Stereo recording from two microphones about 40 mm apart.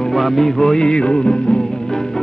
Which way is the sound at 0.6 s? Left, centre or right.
Centre.